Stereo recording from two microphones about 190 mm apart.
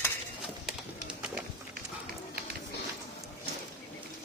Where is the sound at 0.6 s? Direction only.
5° right (ahead or behind).